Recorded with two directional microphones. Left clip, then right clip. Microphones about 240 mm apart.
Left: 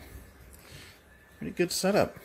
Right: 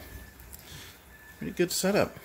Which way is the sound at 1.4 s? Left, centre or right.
Centre.